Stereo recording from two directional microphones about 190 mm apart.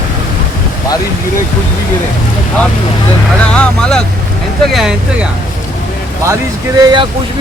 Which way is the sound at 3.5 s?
5° left (ahead or behind).